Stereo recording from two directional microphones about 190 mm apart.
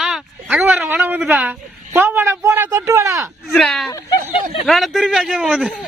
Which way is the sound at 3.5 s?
Centre (ahead or behind).